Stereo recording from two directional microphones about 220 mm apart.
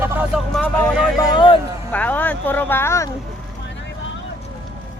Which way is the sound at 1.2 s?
20° left (ahead or behind).